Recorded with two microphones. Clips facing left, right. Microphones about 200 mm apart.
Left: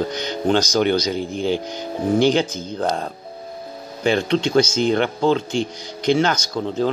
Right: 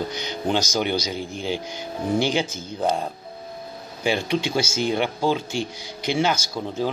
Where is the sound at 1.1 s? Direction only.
50° left (ahead or behind).